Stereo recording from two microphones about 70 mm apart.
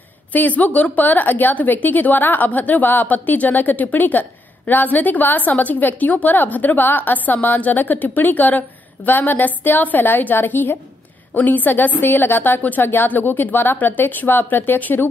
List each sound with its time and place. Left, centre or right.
0.3 s a woman's voice: left